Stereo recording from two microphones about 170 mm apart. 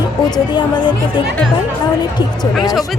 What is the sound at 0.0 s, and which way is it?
Speech, 25° left (ahead or behind).